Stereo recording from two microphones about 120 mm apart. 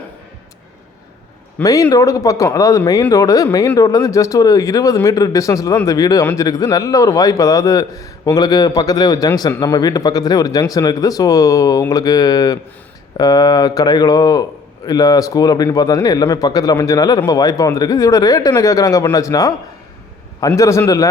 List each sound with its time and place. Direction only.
1.6 s a man's voice: 30° left (ahead or behind)
20.6 s speech: 25° left (ahead or behind)